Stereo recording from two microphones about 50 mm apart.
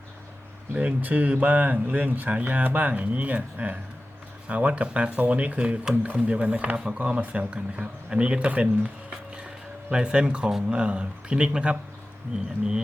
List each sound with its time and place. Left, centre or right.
0.7 s speech: right